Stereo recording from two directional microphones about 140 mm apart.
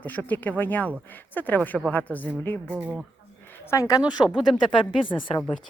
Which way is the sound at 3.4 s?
15° left (ahead or behind).